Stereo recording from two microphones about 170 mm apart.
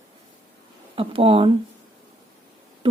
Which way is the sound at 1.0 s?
35° right (ahead or behind).